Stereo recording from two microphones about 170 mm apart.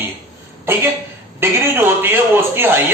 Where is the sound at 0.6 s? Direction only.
15° right (ahead or behind).